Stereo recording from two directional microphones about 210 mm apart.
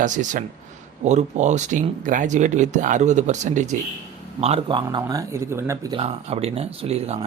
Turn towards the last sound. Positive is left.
turn(degrees=-30)  # may be behind; listen again after turning